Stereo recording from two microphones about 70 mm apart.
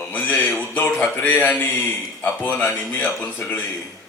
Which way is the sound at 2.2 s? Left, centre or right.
Left.